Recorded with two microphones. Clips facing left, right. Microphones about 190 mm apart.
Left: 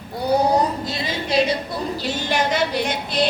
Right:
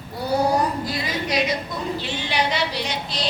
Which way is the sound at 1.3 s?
30° left (ahead or behind).